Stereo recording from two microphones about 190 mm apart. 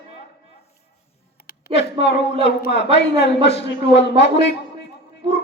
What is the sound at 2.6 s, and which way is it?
A man's voice, 65° left (ahead or behind).